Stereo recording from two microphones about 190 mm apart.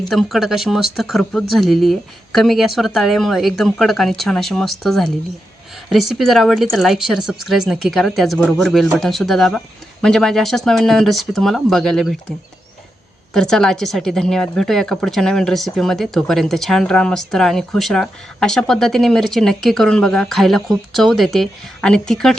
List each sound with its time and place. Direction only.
0.1 s speech: centre (ahead or behind)
13.3 s speech: 5° left (ahead or behind)